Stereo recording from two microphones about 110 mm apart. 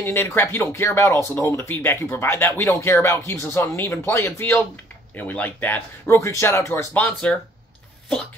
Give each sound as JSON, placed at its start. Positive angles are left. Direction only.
{"t": 0.0, "sound": "speech", "side_deg": 20}